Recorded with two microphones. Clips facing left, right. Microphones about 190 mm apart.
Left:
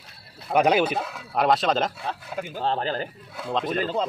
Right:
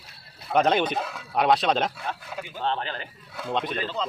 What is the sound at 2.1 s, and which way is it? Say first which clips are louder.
Speech: left 3 dB; 30° left (ahead or behind).